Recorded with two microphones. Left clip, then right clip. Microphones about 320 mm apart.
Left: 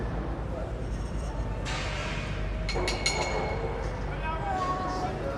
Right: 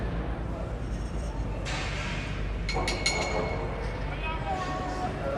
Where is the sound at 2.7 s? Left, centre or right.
Centre.